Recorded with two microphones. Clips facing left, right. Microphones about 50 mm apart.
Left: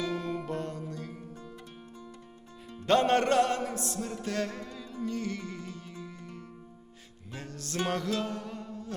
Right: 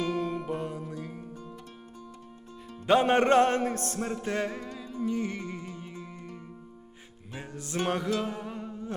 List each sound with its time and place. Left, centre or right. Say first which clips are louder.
0.2 s music: right 3 dB; centre
2.8 s music: right 2 dB; centre